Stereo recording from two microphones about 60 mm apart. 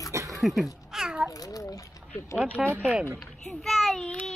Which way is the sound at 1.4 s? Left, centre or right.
Left.